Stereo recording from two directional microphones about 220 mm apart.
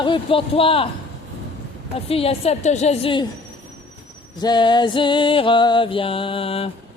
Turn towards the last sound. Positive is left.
turn(degrees=25)  # may be behind; listen again after turning